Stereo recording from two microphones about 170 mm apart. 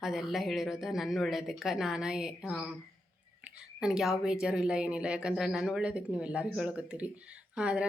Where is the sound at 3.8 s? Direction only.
5° right (ahead or behind).